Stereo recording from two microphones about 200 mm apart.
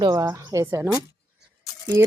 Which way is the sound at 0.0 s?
15° right (ahead or behind).